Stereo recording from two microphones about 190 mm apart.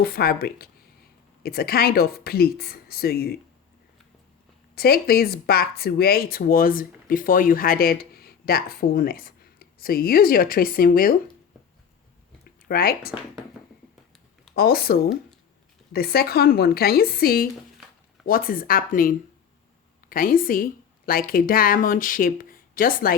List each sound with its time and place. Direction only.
0.0 s speech: 55° left (ahead or behind)
4.7 s speech: 55° left (ahead or behind)
12.5 s speech: 50° left (ahead or behind)
14.5 s speech: 55° left (ahead or behind)